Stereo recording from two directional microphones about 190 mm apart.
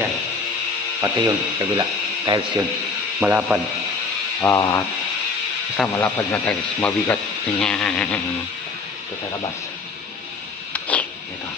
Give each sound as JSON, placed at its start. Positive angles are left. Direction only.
{"t": 1.0, "sound": "speech", "side_deg": -20}
{"t": 3.2, "sound": "speech", "side_deg": -5}
{"t": 4.4, "sound": "speech", "side_deg": 15}
{"t": 10.7, "sound": "a sound", "side_deg": 5}